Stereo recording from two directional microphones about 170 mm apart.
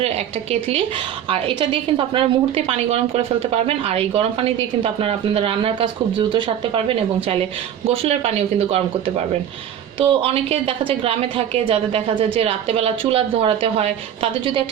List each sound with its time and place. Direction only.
1.3 s a woman's voice: 30° right (ahead or behind)